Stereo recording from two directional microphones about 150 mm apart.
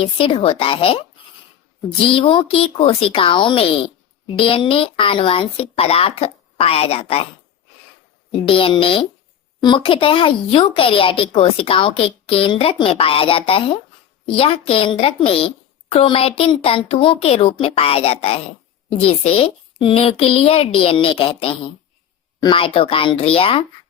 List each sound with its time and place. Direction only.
0.0 s speech: 35° left (ahead or behind)
8.4 s speech: 35° left (ahead or behind)